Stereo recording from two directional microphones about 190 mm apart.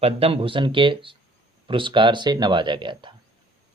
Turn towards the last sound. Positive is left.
turn(degrees=-25)  # may be behind; listen again after turning